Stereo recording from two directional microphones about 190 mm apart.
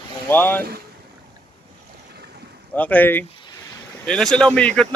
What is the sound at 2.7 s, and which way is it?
Speech, 10° left (ahead or behind).